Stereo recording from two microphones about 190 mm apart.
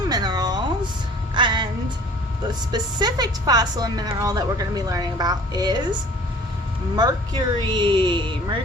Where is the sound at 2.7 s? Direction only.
20° right (ahead or behind).